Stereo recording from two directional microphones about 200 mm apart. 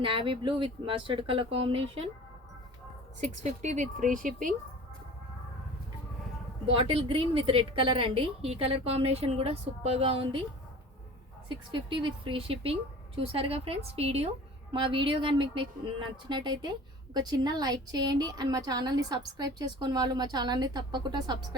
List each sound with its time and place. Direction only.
0.0 s a woman's voice: 25° right (ahead or behind)
3.2 s speech: 35° right (ahead or behind)
6.7 s a woman's voice: 25° right (ahead or behind)
11.4 s a woman's voice: 25° right (ahead or behind)